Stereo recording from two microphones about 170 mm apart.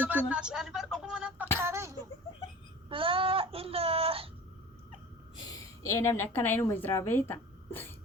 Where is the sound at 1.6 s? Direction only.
15° right (ahead or behind).